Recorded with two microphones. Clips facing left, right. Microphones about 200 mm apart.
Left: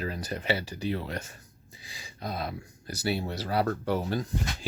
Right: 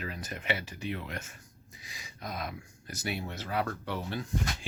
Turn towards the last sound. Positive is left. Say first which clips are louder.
# left 7 dB
turn(degrees=40)  # may be behind; listen again after turning